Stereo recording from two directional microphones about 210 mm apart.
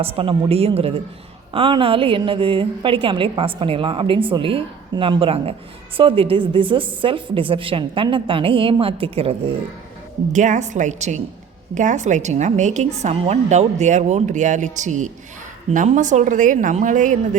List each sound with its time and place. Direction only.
0.0 s a woman's voice: 25° right (ahead or behind)